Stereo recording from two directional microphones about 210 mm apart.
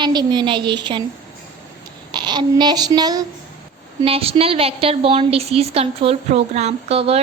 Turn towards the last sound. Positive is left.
turn(degrees=-30)  # may be behind; listen again after turning